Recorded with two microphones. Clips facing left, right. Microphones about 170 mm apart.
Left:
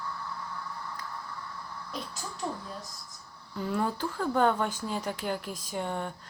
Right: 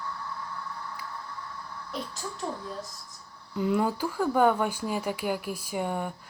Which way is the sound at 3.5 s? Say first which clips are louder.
Right 4 dB; 15° right (ahead or behind).